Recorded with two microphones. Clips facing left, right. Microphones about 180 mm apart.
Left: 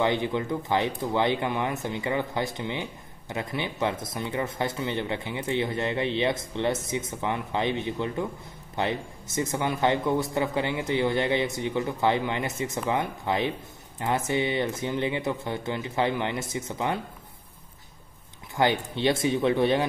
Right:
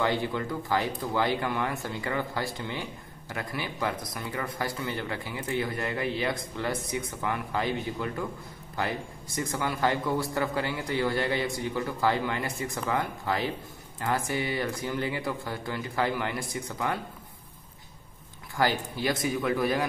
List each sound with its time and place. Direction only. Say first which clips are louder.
0.0 s speech: left 3 dB; 20° left (ahead or behind)
18.6 s speech: left 3 dB; 25° left (ahead or behind)